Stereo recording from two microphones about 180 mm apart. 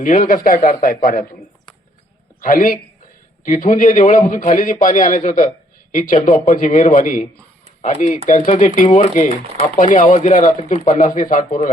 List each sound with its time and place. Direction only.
0.0 s a man's voice: 45° left (ahead or behind)
2.4 s a man's voice: 50° left (ahead or behind)